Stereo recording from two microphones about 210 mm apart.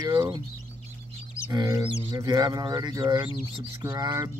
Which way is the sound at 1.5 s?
15° right (ahead or behind).